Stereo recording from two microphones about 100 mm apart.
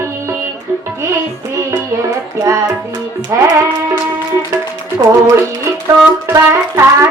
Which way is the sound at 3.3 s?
30° right (ahead or behind).